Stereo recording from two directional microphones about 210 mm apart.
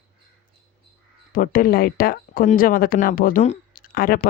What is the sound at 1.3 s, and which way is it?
Speech, 45° left (ahead or behind).